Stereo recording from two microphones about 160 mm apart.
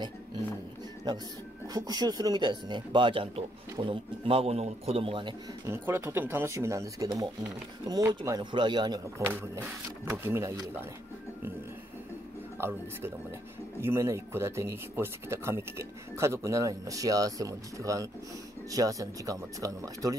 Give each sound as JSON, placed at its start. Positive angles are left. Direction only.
{"t": 1.1, "sound": "speech", "side_deg": -25}
{"t": 5.7, "sound": "speech", "side_deg": -15}
{"t": 9.3, "sound": "speech", "side_deg": -15}
{"t": 12.5, "sound": "speech", "side_deg": -15}